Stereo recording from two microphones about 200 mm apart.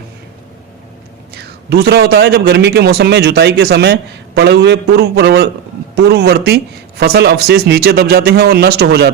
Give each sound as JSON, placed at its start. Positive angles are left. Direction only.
{"t": 1.4, "sound": "a man's voice", "side_deg": -55}